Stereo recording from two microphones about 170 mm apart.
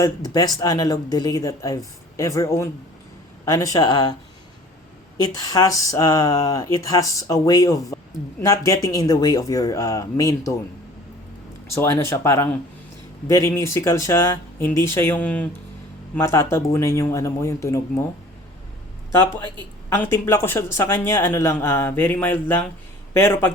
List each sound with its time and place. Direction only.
0.0 s speech: 20° left (ahead or behind)
5.2 s speech: 20° left (ahead or behind)
11.7 s speech: 15° left (ahead or behind)
19.9 s speech: 10° left (ahead or behind)